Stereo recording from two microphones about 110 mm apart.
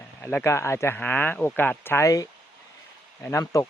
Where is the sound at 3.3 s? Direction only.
30° left (ahead or behind).